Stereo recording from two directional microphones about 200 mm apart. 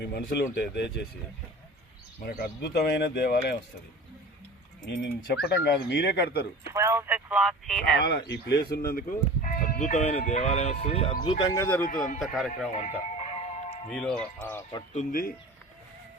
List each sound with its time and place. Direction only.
0.0 s speech: 55° left (ahead or behind)
2.2 s speech: 50° left (ahead or behind)
4.9 s speech: 55° left (ahead or behind)
6.7 s speech: 15° right (ahead or behind)
7.9 s speech: 55° left (ahead or behind); by 11.8 s 15° left (ahead or behind)
11.8 s speech: 45° left (ahead or behind)
12.2 s speech: centre (ahead or behind)
12.7 s music: 35° left (ahead or behind)
13.9 s speech: 5° left (ahead or behind)
14.9 s speech: 45° left (ahead or behind)